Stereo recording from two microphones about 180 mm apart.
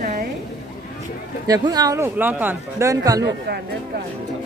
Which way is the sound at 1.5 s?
20° right (ahead or behind).